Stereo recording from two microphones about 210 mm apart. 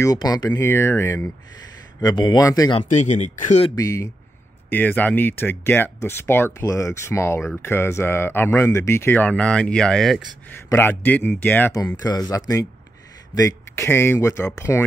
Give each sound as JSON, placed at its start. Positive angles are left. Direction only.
{"t": 0.0, "sound": "speech", "side_deg": 15}
{"t": 2.9, "sound": "speech", "side_deg": 35}
{"t": 3.7, "sound": "speech", "side_deg": 15}